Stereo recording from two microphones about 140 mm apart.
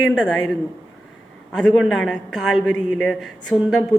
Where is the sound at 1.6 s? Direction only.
5° left (ahead or behind).